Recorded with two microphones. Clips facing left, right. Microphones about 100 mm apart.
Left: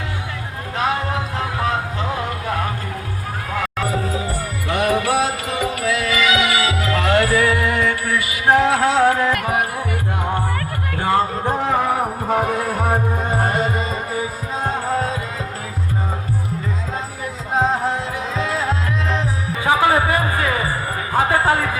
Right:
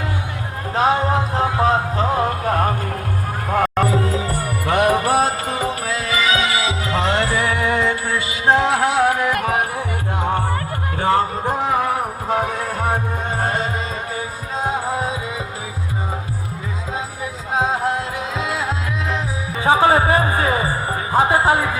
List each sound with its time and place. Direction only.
0.8 s music: 35° right (ahead or behind)
11.4 s music: 5° right (ahead or behind)
14.8 s music: 10° right (ahead or behind)
17.5 s music: 5° right (ahead or behind)
19.6 s music: 25° right (ahead or behind)